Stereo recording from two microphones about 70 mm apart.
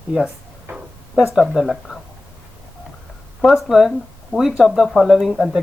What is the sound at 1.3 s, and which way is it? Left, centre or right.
Speech, centre.